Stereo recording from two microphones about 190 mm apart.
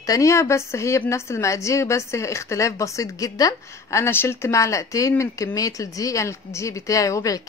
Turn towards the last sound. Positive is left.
turn(degrees=15)  # may be behind; listen again after turning